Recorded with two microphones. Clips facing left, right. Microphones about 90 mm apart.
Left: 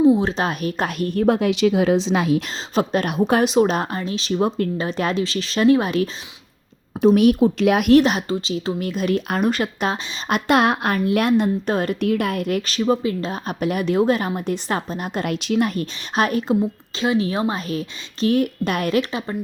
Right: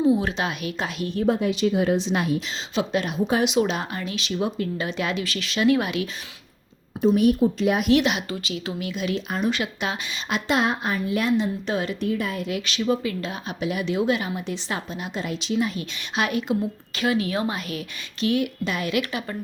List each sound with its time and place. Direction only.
0.0 s speech: 30° left (ahead or behind); by 2.4 s 90° left
2.7 s speech: 45° left (ahead or behind)
3.1 s speech: 60° left (ahead or behind)
3.4 s speech: 40° left (ahead or behind)
7.0 s speech: 75° left (ahead or behind)
7.9 s speech: 40° left (ahead or behind)
11.9 s speech: 65° left (ahead or behind); by 13.4 s 30° left (ahead or behind)
13.5 s speech: 50° left (ahead or behind)
17.0 s speech: 30° left (ahead or behind); by 18.9 s 50° left (ahead or behind)
18.9 s a woman's voice: 30° left (ahead or behind)